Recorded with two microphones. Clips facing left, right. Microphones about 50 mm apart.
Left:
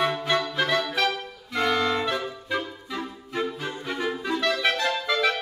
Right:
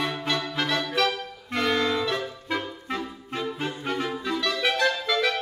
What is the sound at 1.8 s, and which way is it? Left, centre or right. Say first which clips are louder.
Music: even; left.